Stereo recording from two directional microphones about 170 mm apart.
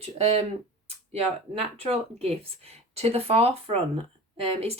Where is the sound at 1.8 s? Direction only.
35° right (ahead or behind).